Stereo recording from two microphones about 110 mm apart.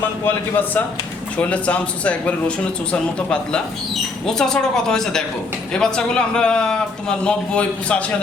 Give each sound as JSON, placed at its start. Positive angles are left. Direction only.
{"t": 0.0, "sound": "a man's voice", "side_deg": 20}